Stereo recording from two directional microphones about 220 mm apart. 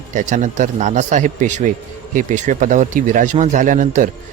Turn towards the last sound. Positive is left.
turn(degrees=-35)  # may be behind; listen again after turning